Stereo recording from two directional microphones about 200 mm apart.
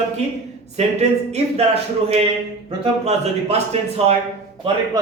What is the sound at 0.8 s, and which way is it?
Speech, 30° right (ahead or behind).